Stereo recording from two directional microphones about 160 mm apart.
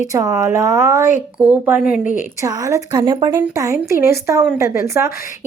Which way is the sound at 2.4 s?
20° right (ahead or behind).